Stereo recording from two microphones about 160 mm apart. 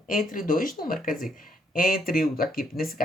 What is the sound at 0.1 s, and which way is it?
Speech, 55° left (ahead or behind).